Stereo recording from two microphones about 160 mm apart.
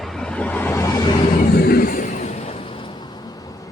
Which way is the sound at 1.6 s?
70° left (ahead or behind).